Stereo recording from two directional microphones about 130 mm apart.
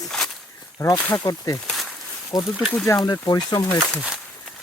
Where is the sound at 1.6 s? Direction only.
Centre (ahead or behind).